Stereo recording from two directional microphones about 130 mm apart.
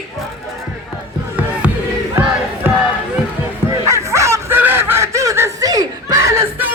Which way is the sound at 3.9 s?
25° right (ahead or behind).